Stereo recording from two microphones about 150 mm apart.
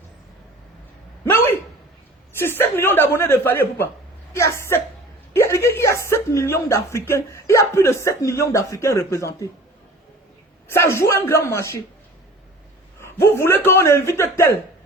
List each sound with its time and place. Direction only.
1.2 s a sound: 15° left (ahead or behind)
2.4 s a man's voice: 15° left (ahead or behind)
10.7 s a man's voice: 15° left (ahead or behind)
13.0 s a man's voice: 15° left (ahead or behind)